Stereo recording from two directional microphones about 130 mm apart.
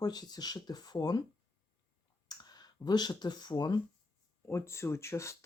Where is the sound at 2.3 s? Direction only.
30° left (ahead or behind).